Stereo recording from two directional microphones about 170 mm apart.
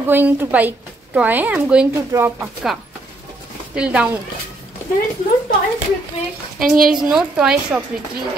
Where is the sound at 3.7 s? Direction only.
5° right (ahead or behind).